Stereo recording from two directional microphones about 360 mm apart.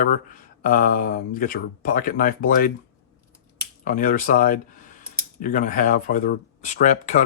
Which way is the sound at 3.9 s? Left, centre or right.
Left.